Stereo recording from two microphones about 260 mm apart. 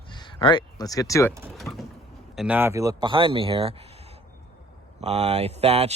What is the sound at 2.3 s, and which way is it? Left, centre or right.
Speech, centre.